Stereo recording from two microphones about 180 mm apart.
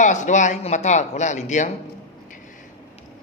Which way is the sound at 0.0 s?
40° left (ahead or behind).